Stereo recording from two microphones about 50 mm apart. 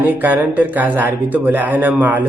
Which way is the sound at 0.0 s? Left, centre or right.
Right.